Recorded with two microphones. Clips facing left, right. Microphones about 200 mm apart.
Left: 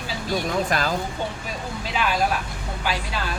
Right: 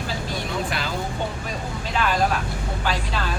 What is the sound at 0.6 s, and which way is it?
Speech, 45° left (ahead or behind).